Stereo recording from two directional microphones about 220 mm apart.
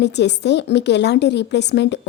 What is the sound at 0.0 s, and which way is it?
Speech, 50° left (ahead or behind).